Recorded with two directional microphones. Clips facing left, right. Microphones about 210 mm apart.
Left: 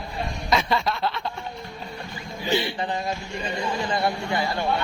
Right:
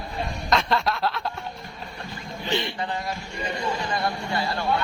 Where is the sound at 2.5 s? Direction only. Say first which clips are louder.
Left 3 dB; 5° left (ahead or behind).